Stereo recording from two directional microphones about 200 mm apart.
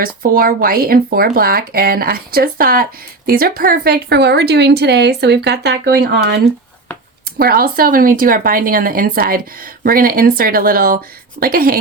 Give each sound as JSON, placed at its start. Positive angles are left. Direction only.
{"t": 0.0, "sound": "speech", "side_deg": -45}